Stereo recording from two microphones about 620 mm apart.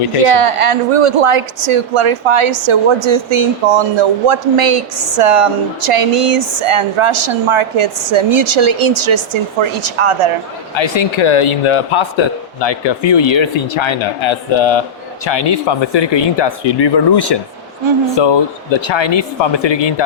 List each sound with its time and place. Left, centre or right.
0.3 s a woman's voice: right
10.8 s speech: left